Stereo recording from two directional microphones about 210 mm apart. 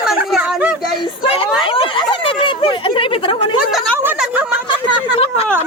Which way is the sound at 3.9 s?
10° right (ahead or behind).